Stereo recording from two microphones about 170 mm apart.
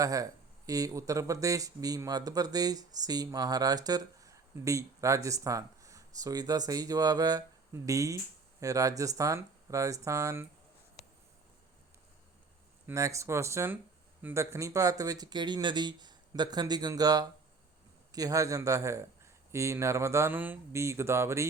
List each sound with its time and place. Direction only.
0.0 s speech: 20° right (ahead or behind)
12.9 s speech: 20° right (ahead or behind)